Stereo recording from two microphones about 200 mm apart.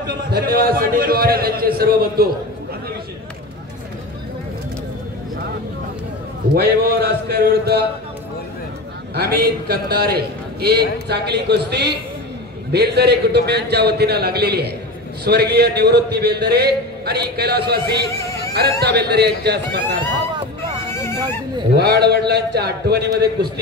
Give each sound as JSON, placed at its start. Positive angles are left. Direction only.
{"t": 0.0, "sound": "a man's voice", "side_deg": -50}
{"t": 6.5, "sound": "a man's voice", "side_deg": -50}
{"t": 9.1, "sound": "a man's voice", "side_deg": -50}
{"t": 18.1, "sound": "a sound", "side_deg": 15}
{"t": 18.5, "sound": "speech", "side_deg": -55}
{"t": 20.9, "sound": "a sound", "side_deg": 15}
{"t": 21.7, "sound": "a man's voice", "side_deg": -55}